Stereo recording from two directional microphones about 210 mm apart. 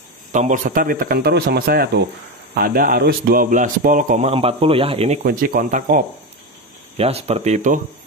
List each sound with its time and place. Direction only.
0.3 s speech: 35° right (ahead or behind)
5.2 s speech: 45° right (ahead or behind)
7.0 s speech: 30° right (ahead or behind)